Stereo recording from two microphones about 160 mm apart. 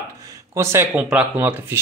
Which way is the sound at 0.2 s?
20° right (ahead or behind).